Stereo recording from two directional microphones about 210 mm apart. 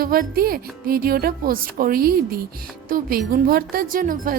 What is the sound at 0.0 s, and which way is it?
A woman's voice, 45° right (ahead or behind).